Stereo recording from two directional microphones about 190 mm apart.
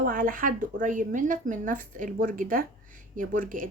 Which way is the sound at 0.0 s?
45° right (ahead or behind).